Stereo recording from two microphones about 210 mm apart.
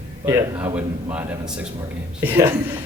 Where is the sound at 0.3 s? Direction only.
10° right (ahead or behind).